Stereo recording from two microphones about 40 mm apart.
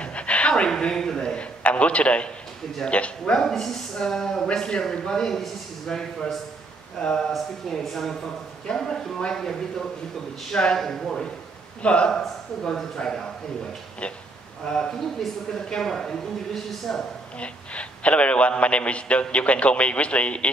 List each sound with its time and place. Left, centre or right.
0.0 s a sound: left
0.7 s a man's voice: centre
3.3 s speech: centre
4.5 s speech: left
7.7 s speech: centre
10.8 s speech: centre
11.8 s speech: left
12.1 s speech: centre
14.7 s speech: centre
17.4 s a man's voice: left